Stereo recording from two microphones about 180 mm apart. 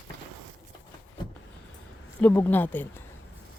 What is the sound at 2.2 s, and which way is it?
Speech, 10° left (ahead or behind).